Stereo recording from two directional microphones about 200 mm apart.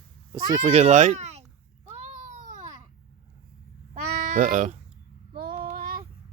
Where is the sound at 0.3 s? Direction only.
25° right (ahead or behind).